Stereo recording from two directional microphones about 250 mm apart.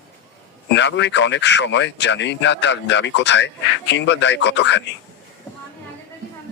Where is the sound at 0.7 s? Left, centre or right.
Left.